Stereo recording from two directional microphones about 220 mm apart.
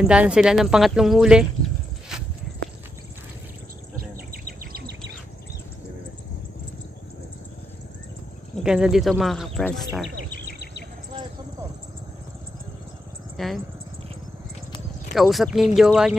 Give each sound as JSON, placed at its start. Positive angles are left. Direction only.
{"t": 0.0, "sound": "speech", "side_deg": -5}
{"t": 4.3, "sound": "insect", "side_deg": -45}
{"t": 8.6, "sound": "speech", "side_deg": -5}
{"t": 10.3, "sound": "a sound", "side_deg": 45}
{"t": 13.4, "sound": "speech", "side_deg": 0}
{"t": 15.1, "sound": "speech", "side_deg": 0}